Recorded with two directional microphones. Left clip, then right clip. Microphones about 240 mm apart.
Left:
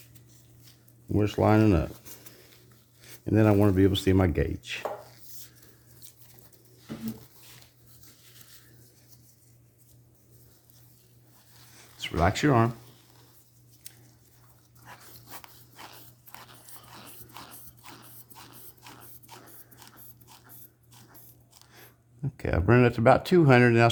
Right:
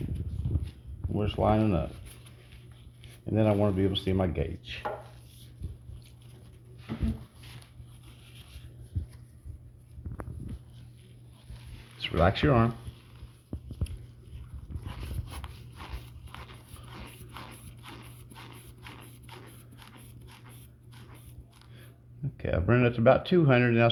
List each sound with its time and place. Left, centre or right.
1.1 s speech: left
3.2 s speech: left
11.9 s speech: centre
16.5 s dog: centre
22.2 s speech: left